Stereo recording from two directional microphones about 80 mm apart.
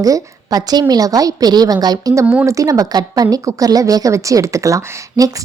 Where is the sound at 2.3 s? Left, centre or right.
Right.